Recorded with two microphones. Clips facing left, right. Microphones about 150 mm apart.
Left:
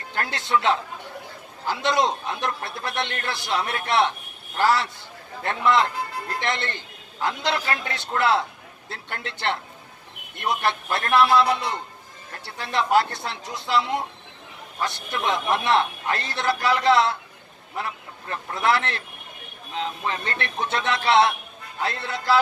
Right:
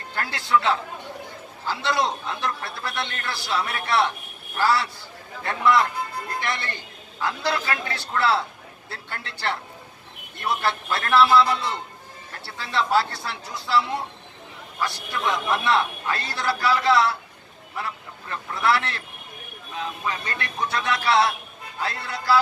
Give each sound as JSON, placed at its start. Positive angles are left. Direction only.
{"t": 0.1, "sound": "a man's voice", "side_deg": 20}
{"t": 18.3, "sound": "a man's voice", "side_deg": 20}